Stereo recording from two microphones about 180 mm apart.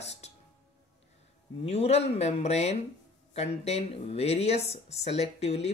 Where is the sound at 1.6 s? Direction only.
35° left (ahead or behind).